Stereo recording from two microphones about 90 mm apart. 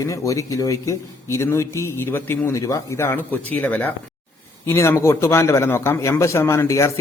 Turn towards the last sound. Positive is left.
turn(degrees=30)  # may be behind; listen again after turning